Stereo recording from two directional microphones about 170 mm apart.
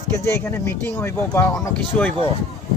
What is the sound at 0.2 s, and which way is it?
Speech, 15° left (ahead or behind).